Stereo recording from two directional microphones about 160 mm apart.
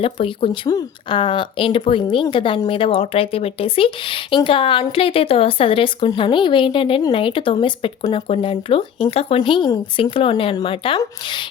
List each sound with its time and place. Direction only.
0.0 s speech: 35° left (ahead or behind)